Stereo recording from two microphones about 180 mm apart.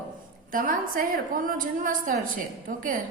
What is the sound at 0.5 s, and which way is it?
Speech, 50° right (ahead or behind).